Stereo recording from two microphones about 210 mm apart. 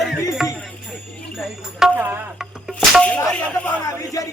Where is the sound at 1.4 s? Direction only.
Centre (ahead or behind).